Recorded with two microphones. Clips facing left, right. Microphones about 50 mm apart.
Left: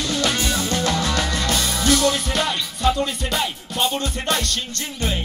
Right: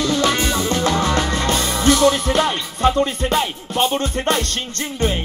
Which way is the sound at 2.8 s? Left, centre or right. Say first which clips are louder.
Right 4 dB; right.